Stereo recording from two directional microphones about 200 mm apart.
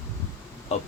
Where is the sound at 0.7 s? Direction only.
35° left (ahead or behind).